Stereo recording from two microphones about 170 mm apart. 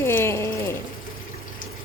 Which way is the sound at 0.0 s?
15° left (ahead or behind).